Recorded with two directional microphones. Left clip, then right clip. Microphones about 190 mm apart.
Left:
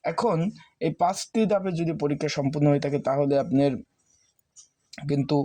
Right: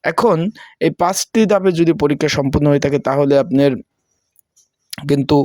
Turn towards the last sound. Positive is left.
turn(degrees=-40)  # may be behind; listen again after turning